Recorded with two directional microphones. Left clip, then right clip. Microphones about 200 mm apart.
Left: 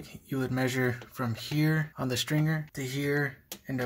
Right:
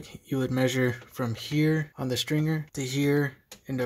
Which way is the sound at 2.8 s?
45° right (ahead or behind).